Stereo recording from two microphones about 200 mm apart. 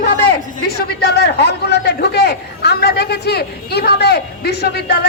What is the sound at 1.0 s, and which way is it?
A man's voice, 55° left (ahead or behind).